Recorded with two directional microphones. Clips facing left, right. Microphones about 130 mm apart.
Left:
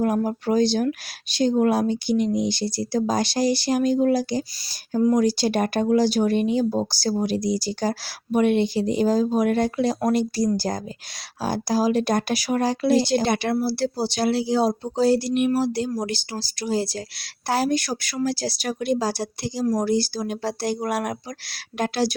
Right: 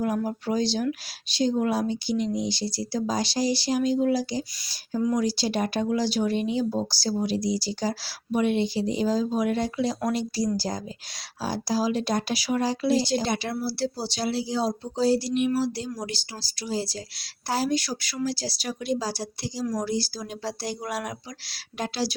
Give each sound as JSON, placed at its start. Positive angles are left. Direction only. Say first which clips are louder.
{"t": 0.0, "sound": "speech", "louder": "left 4 dB", "side_deg": 50}